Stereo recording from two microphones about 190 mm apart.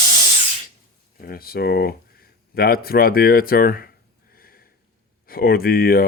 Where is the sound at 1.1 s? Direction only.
50° left (ahead or behind).